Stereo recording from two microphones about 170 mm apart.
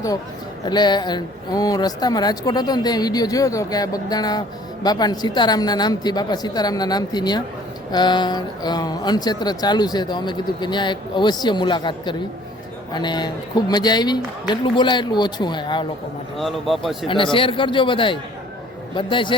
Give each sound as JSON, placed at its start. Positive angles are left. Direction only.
{"t": 0.6, "sound": "speech", "side_deg": 25}
{"t": 16.4, "sound": "speech", "side_deg": 0}
{"t": 17.3, "sound": "speech", "side_deg": 30}